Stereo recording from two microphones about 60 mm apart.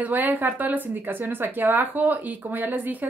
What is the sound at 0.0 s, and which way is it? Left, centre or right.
Speech, right.